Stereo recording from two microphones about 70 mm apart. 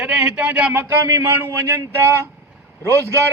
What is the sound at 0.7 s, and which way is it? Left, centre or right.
A man's voice, right.